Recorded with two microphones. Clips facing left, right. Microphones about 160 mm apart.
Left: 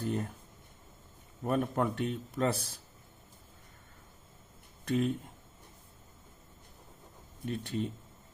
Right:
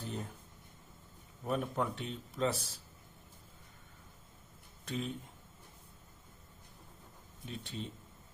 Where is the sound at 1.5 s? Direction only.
55° left (ahead or behind).